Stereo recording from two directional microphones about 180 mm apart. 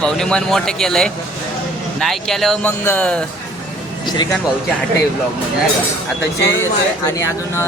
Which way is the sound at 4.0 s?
25° left (ahead or behind).